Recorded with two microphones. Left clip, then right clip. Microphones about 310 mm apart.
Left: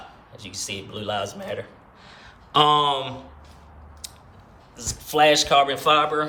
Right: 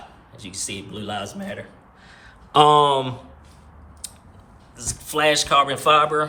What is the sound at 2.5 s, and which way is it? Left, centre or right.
Speech, centre.